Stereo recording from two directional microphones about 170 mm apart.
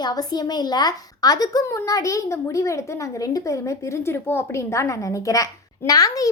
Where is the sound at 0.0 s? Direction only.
25° left (ahead or behind).